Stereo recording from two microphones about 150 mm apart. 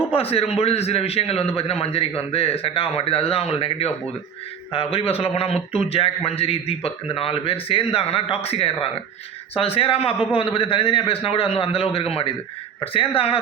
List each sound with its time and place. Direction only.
0.1 s a man's voice: 40° left (ahead or behind)